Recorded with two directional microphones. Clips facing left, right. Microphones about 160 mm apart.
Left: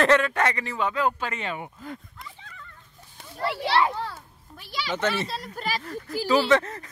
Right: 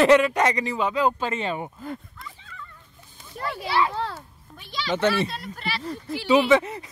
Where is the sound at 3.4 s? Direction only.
75° left (ahead or behind).